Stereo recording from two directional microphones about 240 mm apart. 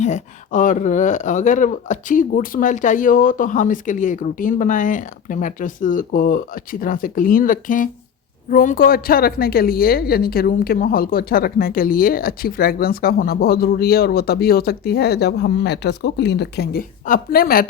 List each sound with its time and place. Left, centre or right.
0.0 s a woman's voice: left